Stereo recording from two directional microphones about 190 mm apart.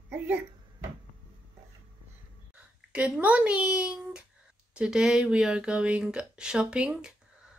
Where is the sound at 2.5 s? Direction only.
5° right (ahead or behind).